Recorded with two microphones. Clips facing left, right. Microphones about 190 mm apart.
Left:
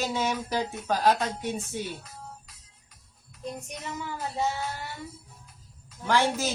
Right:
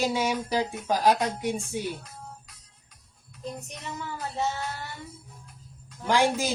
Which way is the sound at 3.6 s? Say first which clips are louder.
Left 1 dB; 10° left (ahead or behind).